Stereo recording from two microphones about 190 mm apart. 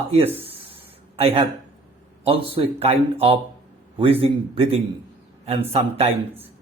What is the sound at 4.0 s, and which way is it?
Speech, 30° right (ahead or behind).